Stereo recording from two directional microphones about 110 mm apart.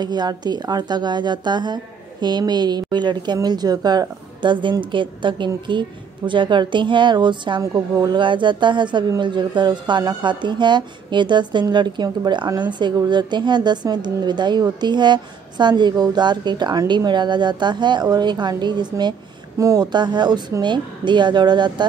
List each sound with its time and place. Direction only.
0.0 s a woman's voice: 40° right (ahead or behind)